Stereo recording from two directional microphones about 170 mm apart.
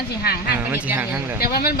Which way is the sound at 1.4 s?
60° left (ahead or behind).